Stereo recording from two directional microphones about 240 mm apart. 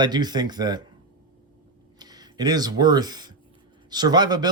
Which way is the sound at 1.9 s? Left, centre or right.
Centre.